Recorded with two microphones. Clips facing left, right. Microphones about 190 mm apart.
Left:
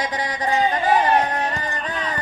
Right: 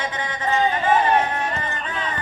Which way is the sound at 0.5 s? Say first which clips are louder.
Even; 35° left (ahead or behind).